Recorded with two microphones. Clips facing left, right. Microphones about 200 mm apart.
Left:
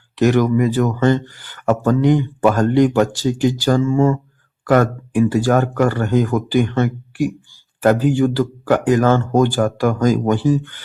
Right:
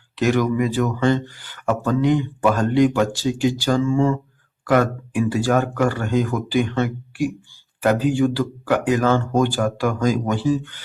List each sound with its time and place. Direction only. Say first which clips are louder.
0.2 s speech: left 4 dB; 45° left (ahead or behind)